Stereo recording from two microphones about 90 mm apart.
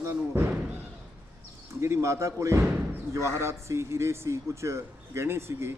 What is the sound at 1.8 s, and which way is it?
A man's voice, 30° right (ahead or behind).